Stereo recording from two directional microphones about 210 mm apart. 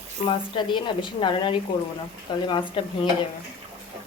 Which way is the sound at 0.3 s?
25° left (ahead or behind).